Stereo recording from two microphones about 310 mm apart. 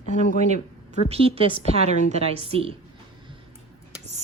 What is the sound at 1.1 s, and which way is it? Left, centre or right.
A woman's voice, centre.